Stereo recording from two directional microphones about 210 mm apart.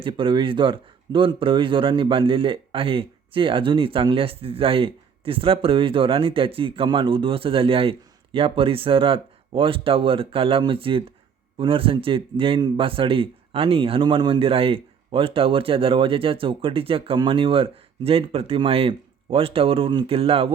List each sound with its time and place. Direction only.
0.0 s speech: 25° right (ahead or behind)